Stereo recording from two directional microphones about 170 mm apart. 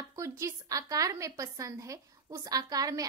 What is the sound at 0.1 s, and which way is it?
A woman's voice, 20° right (ahead or behind).